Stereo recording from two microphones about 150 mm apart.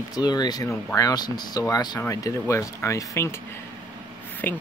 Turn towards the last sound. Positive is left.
turn(degrees=15)  # may be behind; listen again after turning